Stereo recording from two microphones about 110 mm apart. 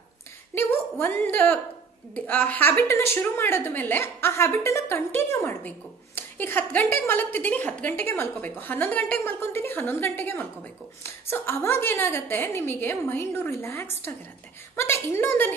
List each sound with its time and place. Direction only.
0.6 s a woman's voice: 20° left (ahead or behind)